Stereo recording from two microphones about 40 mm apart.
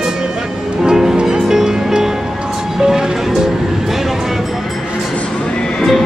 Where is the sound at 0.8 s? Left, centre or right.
Centre.